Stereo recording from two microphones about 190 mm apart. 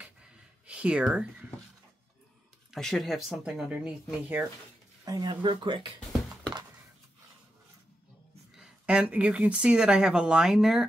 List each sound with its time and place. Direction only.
0.0 s a sound: 5° right (ahead or behind)
2.7 s speech: centre (ahead or behind)
5.0 s speech: 20° right (ahead or behind)
8.5 s speech: 5° right (ahead or behind)